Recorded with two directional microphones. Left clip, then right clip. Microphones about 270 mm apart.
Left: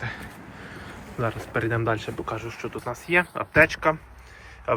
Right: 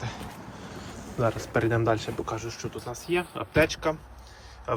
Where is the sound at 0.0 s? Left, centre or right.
Centre.